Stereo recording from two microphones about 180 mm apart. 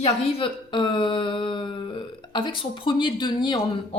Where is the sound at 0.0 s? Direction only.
30° left (ahead or behind).